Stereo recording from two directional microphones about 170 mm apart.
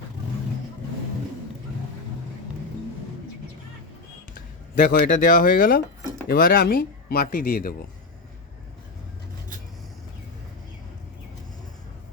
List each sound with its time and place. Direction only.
4.8 s speech: 50° left (ahead or behind)